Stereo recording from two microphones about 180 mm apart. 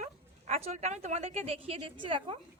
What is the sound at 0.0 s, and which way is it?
A woman's voice, 40° right (ahead or behind).